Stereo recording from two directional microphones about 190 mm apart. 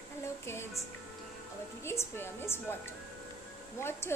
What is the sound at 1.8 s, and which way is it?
A woman's voice, 15° left (ahead or behind).